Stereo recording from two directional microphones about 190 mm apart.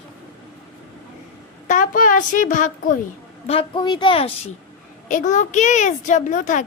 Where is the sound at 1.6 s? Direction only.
45° left (ahead or behind).